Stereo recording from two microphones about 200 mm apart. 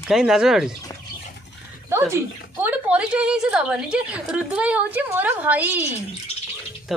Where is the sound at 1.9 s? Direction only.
10° right (ahead or behind).